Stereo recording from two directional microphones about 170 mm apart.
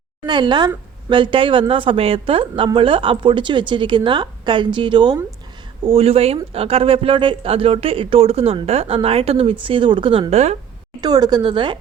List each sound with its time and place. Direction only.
0.3 s a woman's voice: 25° right (ahead or behind)
11.0 s a woman's voice: 25° right (ahead or behind)